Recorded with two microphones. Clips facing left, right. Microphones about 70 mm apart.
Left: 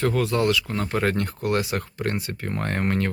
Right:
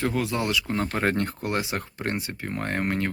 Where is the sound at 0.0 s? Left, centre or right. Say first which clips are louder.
Left 4 dB; centre.